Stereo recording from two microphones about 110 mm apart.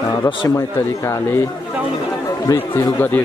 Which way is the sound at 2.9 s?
20° left (ahead or behind).